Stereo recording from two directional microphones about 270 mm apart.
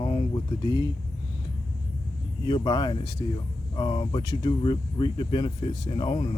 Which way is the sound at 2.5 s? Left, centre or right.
Centre.